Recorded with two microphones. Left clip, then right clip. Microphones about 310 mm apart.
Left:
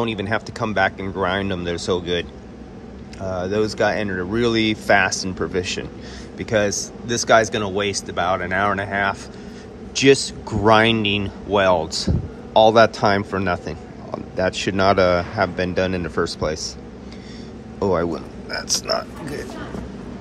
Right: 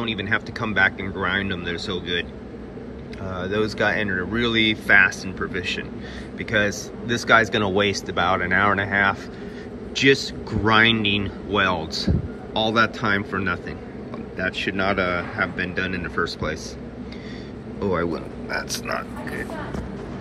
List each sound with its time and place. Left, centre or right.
0.0 s a man's voice: centre
3.3 s a man's voice: centre
17.7 s a man's voice: centre